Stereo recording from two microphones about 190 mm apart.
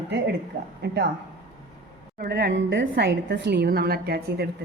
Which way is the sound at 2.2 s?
60° right (ahead or behind).